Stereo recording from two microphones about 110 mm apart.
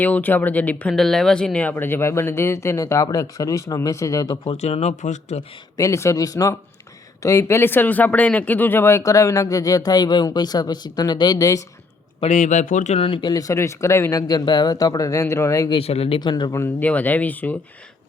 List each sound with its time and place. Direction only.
0.0 s speech: 15° left (ahead or behind)
4.6 s speech: 90° left
5.7 s speech: 30° left (ahead or behind)
12.2 s speech: 55° left (ahead or behind)
12.8 s speech: 90° left
13.3 s speech: 30° left (ahead or behind)
15.7 s speech: 65° left (ahead or behind)
16.2 s speech: 40° left (ahead or behind)
16.8 s speech: 15° left (ahead or behind)